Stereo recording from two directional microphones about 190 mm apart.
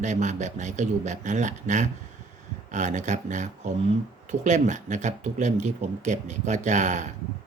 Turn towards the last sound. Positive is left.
turn(degrees=-40)  # may be behind; listen again after turning